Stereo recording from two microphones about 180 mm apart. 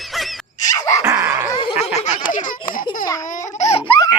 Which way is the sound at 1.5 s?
30° left (ahead or behind).